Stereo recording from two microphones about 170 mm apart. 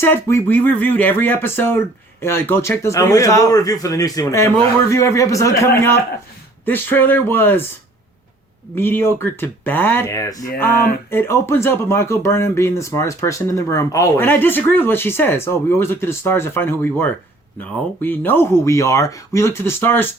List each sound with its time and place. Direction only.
0.0 s speech: 15° left (ahead or behind)
8.7 s speech: 15° left (ahead or behind)